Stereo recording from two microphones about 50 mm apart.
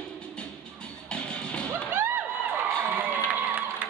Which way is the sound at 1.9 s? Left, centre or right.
Right.